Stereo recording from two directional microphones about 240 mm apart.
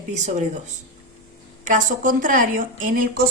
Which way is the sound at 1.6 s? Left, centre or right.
Right.